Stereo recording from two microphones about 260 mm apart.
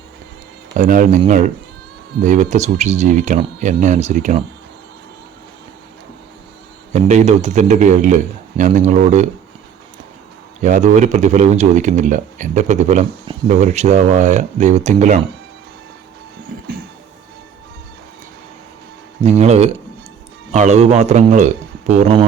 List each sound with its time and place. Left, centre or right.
0.8 s speech: right
6.9 s speech: right
10.6 s speech: right
19.2 s speech: right